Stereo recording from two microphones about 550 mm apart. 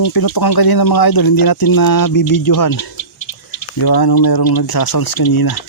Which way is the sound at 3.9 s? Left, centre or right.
Left.